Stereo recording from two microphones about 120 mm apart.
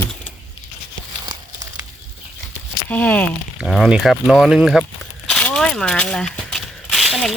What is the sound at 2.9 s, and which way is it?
Speech, 10° left (ahead or behind).